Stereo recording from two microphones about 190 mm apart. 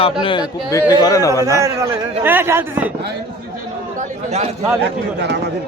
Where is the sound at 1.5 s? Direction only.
15° right (ahead or behind).